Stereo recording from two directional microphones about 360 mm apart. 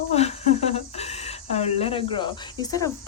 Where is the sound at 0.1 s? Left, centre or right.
Centre.